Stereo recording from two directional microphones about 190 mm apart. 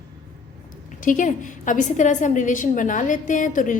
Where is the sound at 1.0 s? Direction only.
45° left (ahead or behind).